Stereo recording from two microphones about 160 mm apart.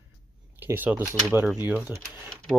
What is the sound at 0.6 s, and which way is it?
Speech, 10° right (ahead or behind).